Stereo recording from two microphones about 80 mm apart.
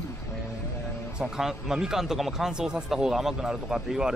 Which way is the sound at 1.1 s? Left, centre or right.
Centre.